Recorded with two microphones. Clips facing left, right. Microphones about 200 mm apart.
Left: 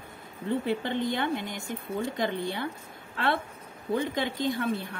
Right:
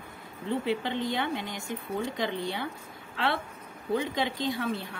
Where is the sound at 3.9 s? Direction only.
50° left (ahead or behind).